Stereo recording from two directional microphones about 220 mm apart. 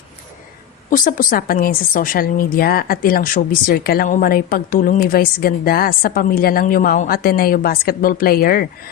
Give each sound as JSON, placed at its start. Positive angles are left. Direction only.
{"t": 0.9, "sound": "a woman's voice", "side_deg": 40}